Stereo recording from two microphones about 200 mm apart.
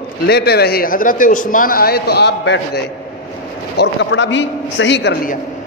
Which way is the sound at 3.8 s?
65° left (ahead or behind).